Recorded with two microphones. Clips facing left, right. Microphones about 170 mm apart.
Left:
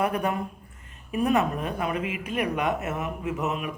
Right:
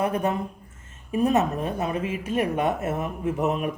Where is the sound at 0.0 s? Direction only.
20° right (ahead or behind).